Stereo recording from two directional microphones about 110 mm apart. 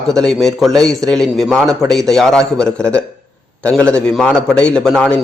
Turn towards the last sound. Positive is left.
turn(degrees=5)  # may be behind; listen again after turning